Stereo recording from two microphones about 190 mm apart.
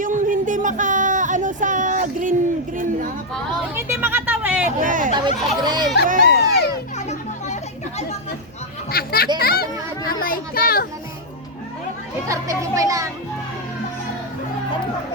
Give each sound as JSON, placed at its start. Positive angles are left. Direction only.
{"t": 0.0, "sound": "a sound", "side_deg": -45}
{"t": 3.8, "sound": "a sound", "side_deg": -15}
{"t": 4.8, "sound": "speech", "side_deg": -45}
{"t": 5.1, "sound": "speech", "side_deg": -25}
{"t": 6.1, "sound": "speech", "side_deg": -45}
{"t": 7.1, "sound": "chatter", "side_deg": 35}
{"t": 8.9, "sound": "a child's voice", "side_deg": 50}
{"t": 12.3, "sound": "speech", "side_deg": -15}